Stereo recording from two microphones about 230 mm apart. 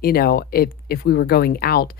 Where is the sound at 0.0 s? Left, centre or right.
Left.